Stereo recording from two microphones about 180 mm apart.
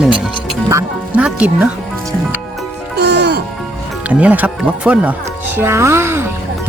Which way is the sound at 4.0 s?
5° right (ahead or behind).